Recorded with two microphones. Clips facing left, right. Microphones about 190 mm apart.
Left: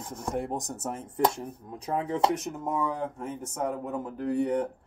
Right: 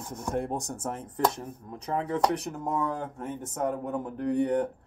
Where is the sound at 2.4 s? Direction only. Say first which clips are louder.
Even; centre (ahead or behind).